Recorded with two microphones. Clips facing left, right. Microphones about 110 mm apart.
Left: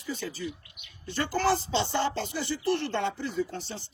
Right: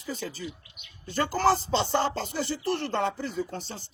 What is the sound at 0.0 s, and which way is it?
Speech, 45° right (ahead or behind).